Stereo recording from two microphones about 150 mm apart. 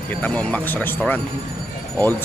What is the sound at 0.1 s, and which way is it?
Speech, 10° left (ahead or behind).